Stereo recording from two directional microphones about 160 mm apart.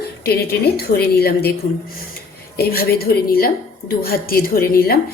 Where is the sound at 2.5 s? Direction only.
70° left (ahead or behind).